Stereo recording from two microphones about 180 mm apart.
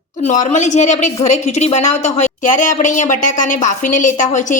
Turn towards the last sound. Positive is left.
turn(degrees=45)  # may be behind; listen again after turning